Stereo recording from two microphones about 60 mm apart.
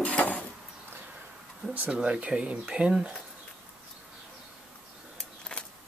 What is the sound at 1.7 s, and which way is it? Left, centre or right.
Speech, right.